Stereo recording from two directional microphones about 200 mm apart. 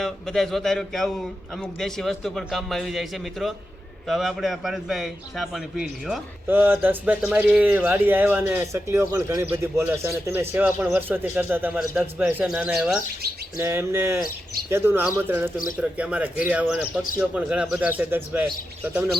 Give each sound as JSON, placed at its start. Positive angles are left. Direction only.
{"t": 0.0, "sound": "a man's voice", "side_deg": 0}
{"t": 13.6, "sound": "a man's voice", "side_deg": -10}